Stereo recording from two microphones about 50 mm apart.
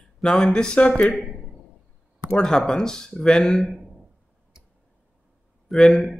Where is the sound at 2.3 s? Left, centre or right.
Centre.